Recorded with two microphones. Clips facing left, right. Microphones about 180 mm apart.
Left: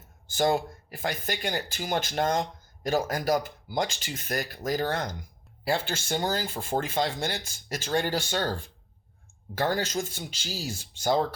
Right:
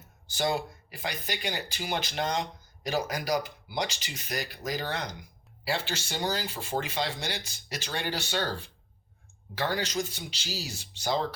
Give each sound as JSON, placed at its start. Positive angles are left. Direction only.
{"t": 0.3, "sound": "speech", "side_deg": 50}